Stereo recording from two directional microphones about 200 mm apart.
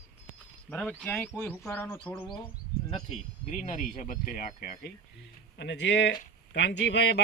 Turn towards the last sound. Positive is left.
turn(degrees=60)  # may be behind; listen again after turning